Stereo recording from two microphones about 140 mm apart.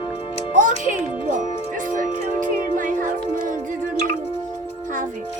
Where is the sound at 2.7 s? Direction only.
70° right (ahead or behind).